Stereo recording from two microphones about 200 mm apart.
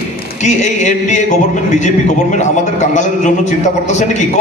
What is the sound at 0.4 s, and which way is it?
Speech, 35° left (ahead or behind).